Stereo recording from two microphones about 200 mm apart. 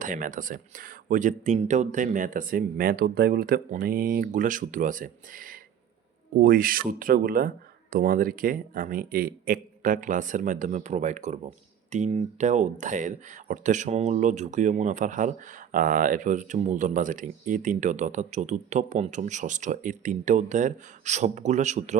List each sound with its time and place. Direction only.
0.0 s speech: 40° right (ahead or behind)